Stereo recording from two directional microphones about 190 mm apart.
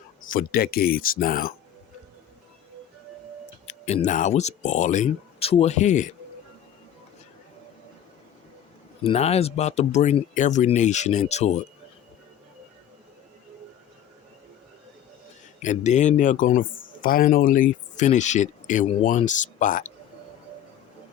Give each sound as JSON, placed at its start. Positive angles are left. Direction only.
{"t": 0.2, "sound": "speech", "side_deg": 45}
{"t": 3.7, "sound": "speech", "side_deg": 35}
{"t": 9.0, "sound": "speech", "side_deg": 35}
{"t": 15.6, "sound": "speech", "side_deg": 40}